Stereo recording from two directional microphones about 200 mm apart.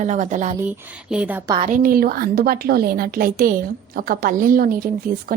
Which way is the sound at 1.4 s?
20° right (ahead or behind).